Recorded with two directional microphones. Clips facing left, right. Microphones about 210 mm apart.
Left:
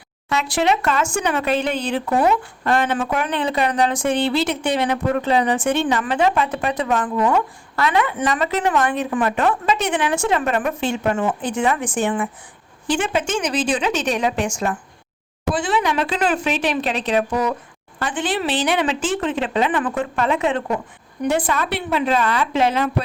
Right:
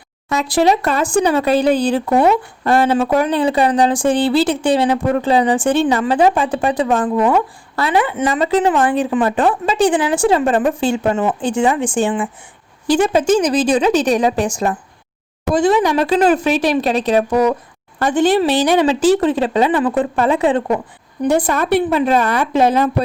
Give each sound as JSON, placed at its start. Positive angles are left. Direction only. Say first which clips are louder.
{"t": 0.5, "sound": "speech", "louder": "right 5 dB", "side_deg": -35}